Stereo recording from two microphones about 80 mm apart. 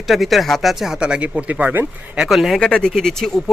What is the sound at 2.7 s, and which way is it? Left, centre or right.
Speech, centre.